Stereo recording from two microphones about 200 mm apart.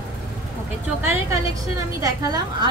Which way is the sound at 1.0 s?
10° right (ahead or behind).